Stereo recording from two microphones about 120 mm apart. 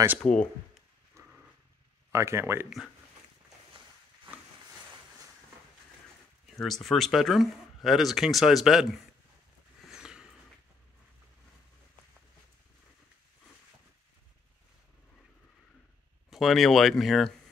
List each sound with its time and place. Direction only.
0.2 s speech: 10° left (ahead or behind)
1.2 s dog: 25° right (ahead or behind)
2.1 s speech: 25° right (ahead or behind)
6.4 s speech: centre (ahead or behind)
9.8 s a sound: 5° right (ahead or behind)
16.3 s speech: centre (ahead or behind)